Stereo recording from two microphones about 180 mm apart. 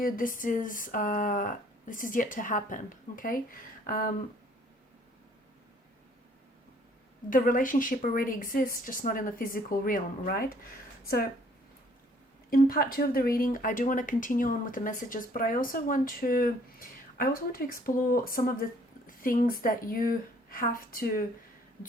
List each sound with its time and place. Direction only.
0.0 s speech: 50° left (ahead or behind)
7.3 s speech: 50° left (ahead or behind)
12.5 s a woman's voice: 50° left (ahead or behind)